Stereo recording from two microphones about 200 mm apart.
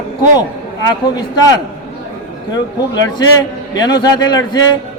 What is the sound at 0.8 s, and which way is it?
Speech, 20° left (ahead or behind).